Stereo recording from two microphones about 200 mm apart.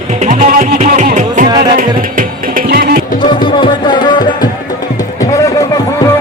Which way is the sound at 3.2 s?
25° left (ahead or behind).